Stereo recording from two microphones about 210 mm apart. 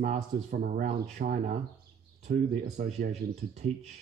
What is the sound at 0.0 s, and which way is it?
Speech, 35° right (ahead or behind).